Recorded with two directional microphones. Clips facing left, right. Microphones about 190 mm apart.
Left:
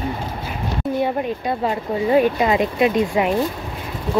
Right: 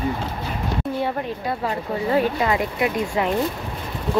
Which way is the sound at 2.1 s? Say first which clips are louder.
Left 4 dB; 20° left (ahead or behind).